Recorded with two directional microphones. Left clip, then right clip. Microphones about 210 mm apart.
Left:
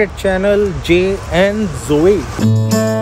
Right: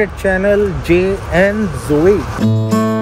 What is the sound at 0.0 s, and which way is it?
Speech, 15° left (ahead or behind).